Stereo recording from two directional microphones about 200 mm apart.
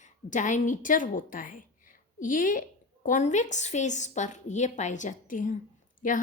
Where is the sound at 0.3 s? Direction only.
40° left (ahead or behind).